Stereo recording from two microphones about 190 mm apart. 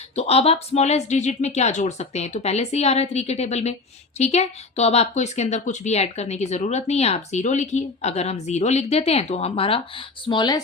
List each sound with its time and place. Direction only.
0.2 s speech: 30° left (ahead or behind)